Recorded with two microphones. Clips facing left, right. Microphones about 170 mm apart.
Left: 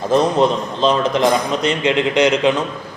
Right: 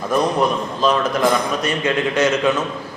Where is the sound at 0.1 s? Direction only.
25° left (ahead or behind).